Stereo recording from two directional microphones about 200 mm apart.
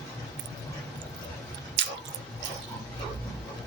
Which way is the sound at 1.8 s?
65° right (ahead or behind).